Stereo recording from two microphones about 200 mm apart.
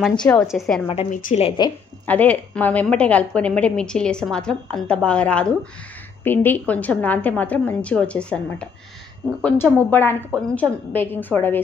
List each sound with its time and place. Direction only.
0.2 s a woman's voice: 5° left (ahead or behind)
1.1 s a woman's voice: 35° left (ahead or behind)
2.0 s a woman's voice: 10° left (ahead or behind)